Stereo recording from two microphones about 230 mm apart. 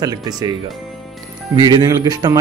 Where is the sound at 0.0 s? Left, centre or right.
Centre.